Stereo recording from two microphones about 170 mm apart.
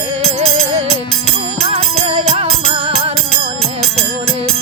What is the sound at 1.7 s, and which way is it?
Music, 35° right (ahead or behind).